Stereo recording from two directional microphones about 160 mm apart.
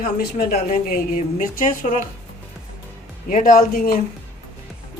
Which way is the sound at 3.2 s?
55° left (ahead or behind).